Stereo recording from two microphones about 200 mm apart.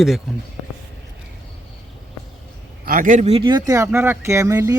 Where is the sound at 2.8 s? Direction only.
45° right (ahead or behind); by 3.6 s 25° right (ahead or behind).